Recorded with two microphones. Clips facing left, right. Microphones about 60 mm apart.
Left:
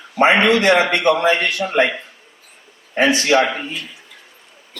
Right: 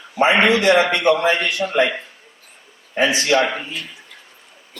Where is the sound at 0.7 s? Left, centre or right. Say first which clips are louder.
Even; left.